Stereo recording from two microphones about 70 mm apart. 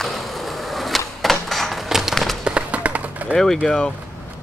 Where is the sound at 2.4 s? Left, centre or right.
Centre.